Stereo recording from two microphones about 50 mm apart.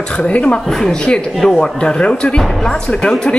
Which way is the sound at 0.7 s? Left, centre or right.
Centre.